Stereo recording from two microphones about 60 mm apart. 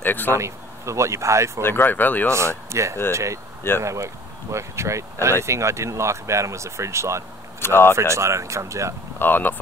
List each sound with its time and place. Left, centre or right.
0.0 s speech: left
0.3 s speech: right
1.6 s speech: left
2.3 s speech: right
7.6 s speech: left
7.9 s speech: right
9.2 s speech: left